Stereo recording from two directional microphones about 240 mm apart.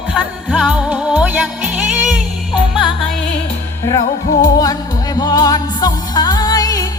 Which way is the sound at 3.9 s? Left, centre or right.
Centre.